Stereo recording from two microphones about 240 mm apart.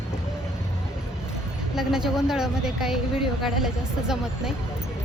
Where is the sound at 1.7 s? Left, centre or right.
Centre.